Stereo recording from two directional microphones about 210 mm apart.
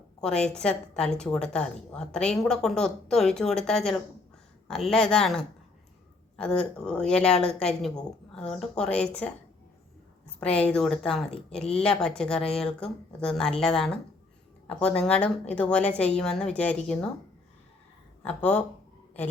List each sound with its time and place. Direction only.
0.2 s a woman's voice: 5° left (ahead or behind)
10.4 s a woman's voice: 5° left (ahead or behind)
18.3 s speech: 5° left (ahead or behind)